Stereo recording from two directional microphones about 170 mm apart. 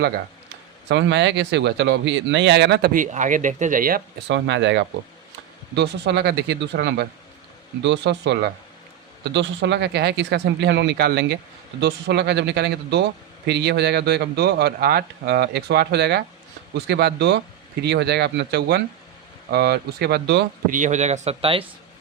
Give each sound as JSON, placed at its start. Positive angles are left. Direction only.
{"t": 0.9, "sound": "speech", "side_deg": -90}
{"t": 2.9, "sound": "a man's voice", "side_deg": -50}
{"t": 16.7, "sound": "a man's voice", "side_deg": -85}
{"t": 20.7, "sound": "a man's voice", "side_deg": -50}